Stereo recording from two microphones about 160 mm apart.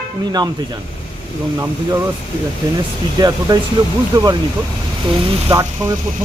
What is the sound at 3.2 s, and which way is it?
Speech, 25° right (ahead or behind).